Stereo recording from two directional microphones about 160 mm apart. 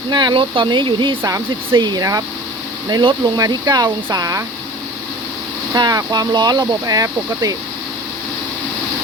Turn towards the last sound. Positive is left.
turn(degrees=-20)  # may be behind; listen again after turning